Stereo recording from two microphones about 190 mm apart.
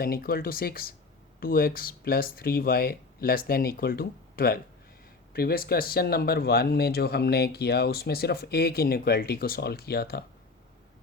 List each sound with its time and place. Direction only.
0.0 s speech: 50° left (ahead or behind)